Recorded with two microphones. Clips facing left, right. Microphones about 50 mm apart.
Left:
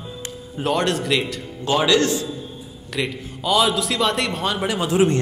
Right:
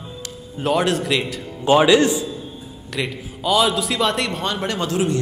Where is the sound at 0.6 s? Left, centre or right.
Centre.